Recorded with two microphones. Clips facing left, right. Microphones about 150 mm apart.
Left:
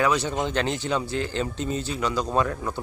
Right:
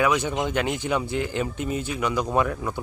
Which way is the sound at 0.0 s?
10° right (ahead or behind).